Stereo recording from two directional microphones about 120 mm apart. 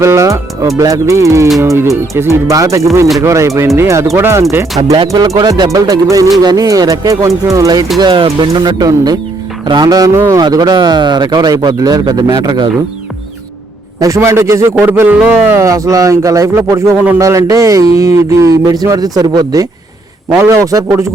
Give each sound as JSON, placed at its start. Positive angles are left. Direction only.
{"t": 0.0, "sound": "speech", "side_deg": -25}
{"t": 4.9, "sound": "speech", "side_deg": -35}
{"t": 7.9, "sound": "a man's voice", "side_deg": -40}
{"t": 10.1, "sound": "speech", "side_deg": -20}
{"t": 10.4, "sound": "a man's voice", "side_deg": -35}
{"t": 14.0, "sound": "speech", "side_deg": -25}
{"t": 15.5, "sound": "speech", "side_deg": -25}